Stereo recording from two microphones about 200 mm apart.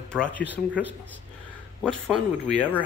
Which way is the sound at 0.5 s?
10° right (ahead or behind).